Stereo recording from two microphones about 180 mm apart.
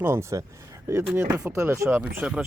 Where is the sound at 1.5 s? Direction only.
15° right (ahead or behind).